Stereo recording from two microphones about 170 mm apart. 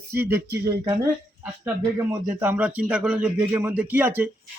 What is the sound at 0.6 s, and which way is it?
Speech, 20° right (ahead or behind).